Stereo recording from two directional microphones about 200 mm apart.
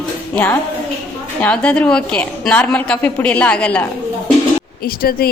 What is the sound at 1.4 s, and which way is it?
A woman's voice, 5° left (ahead or behind).